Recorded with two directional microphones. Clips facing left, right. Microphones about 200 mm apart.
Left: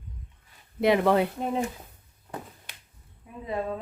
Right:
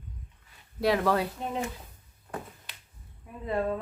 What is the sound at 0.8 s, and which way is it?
Speech, 20° left (ahead or behind).